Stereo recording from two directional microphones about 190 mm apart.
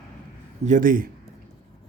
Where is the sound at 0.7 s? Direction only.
45° right (ahead or behind).